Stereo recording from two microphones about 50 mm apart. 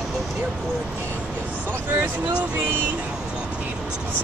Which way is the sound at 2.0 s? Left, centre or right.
Right.